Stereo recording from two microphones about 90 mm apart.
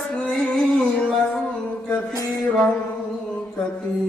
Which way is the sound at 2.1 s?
45° left (ahead or behind).